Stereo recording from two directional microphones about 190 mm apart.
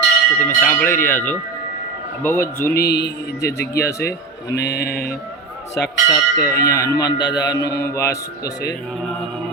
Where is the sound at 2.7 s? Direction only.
55° left (ahead or behind).